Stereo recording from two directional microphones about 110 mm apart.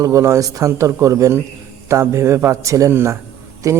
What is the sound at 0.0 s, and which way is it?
A man's voice, 25° right (ahead or behind).